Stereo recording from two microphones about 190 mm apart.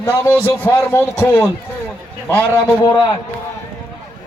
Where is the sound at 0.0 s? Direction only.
10° left (ahead or behind).